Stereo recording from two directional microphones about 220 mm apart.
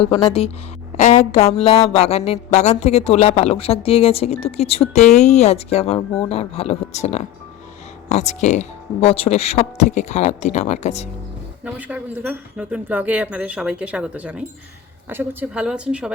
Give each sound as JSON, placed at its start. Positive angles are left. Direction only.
{"t": 0.0, "sound": "a sound", "side_deg": 25}
{"t": 8.1, "sound": "speech", "side_deg": 30}
{"t": 11.6, "sound": "a woman's voice", "side_deg": -5}